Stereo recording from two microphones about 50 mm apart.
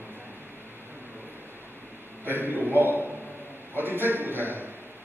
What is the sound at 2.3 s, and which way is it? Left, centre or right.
A man's voice, right.